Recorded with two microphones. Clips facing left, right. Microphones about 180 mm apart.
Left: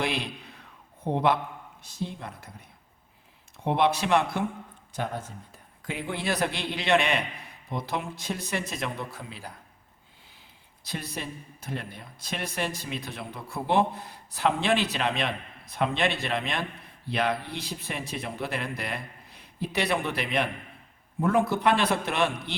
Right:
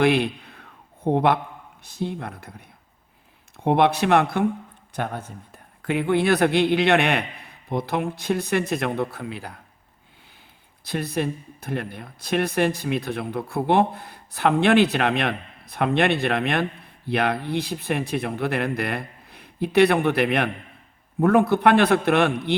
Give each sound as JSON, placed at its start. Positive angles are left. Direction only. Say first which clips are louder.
{"t": 0.0, "sound": "a sound", "louder": "right 11 dB", "side_deg": -60}
{"t": 1.8, "sound": "speech", "louder": "right 6 dB", "side_deg": -60}
{"t": 10.8, "sound": "speech", "louder": "right 10 dB", "side_deg": -55}